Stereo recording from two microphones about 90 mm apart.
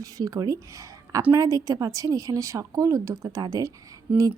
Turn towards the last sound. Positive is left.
turn(degrees=-15)  # may be behind; listen again after turning